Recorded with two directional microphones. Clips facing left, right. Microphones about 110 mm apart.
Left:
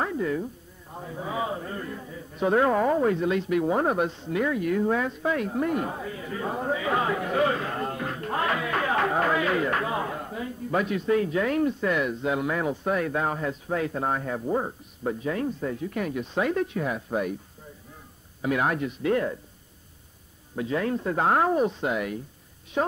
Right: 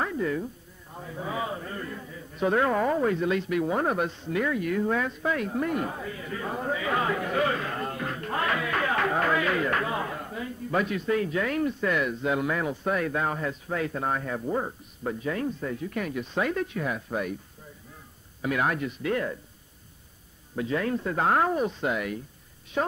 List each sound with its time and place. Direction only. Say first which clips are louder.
0.2 s a man's voice: left 1 dB; 15° left (ahead or behind)
18.4 s a man's voice: left 2 dB; 20° left (ahead or behind)
20.5 s a man's voice: left 1 dB; 20° left (ahead or behind)